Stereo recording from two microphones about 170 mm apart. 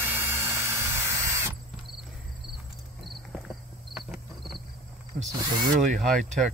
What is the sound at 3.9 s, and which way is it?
Cricket, centre (ahead or behind).